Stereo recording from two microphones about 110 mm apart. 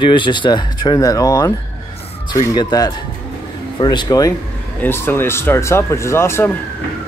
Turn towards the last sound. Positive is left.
turn(degrees=25)  # may be behind; listen again after turning